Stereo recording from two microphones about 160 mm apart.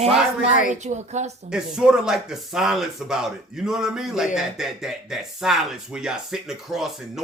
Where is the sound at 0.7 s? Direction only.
45° right (ahead or behind).